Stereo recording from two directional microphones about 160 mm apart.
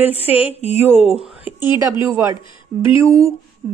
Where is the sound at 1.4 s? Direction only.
25° left (ahead or behind).